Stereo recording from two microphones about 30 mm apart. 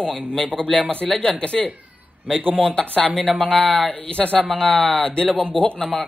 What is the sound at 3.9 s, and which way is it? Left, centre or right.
A man's voice, left.